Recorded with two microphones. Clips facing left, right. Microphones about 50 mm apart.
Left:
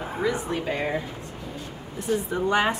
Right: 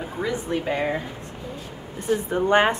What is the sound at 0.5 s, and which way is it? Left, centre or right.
Speech, centre.